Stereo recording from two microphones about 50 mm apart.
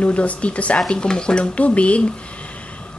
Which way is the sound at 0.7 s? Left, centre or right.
Centre.